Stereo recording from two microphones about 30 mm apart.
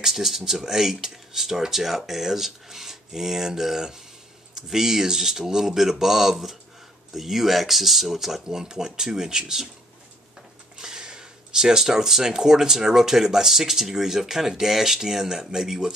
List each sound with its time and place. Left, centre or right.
0.0 s speech: centre
8.5 s speech: right
10.8 s speech: right